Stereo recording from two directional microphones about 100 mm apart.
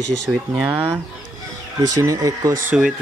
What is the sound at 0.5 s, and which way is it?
Speech, 20° right (ahead or behind).